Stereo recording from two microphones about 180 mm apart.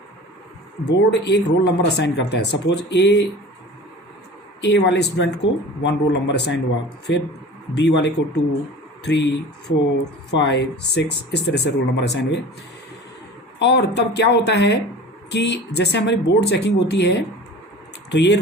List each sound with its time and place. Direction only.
0.9 s speech: 75° left (ahead or behind)
4.6 s speech: 70° left (ahead or behind)
7.1 s speech: 90° left
7.8 s speech: 75° left (ahead or behind)
10.3 s speech: 75° left (ahead or behind)
13.6 s speech: 70° left (ahead or behind)